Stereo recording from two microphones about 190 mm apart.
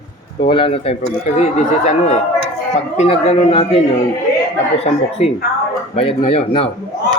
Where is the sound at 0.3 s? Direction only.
25° left (ahead or behind).